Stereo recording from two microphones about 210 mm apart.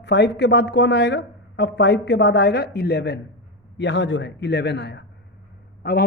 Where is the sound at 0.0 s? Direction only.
55° left (ahead or behind).